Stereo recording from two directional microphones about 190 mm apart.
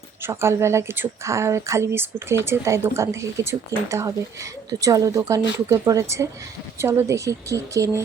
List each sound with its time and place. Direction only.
0.2 s speech: 15° right (ahead or behind)